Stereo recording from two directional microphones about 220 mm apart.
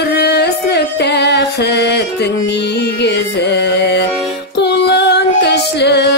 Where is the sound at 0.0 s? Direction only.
50° left (ahead or behind).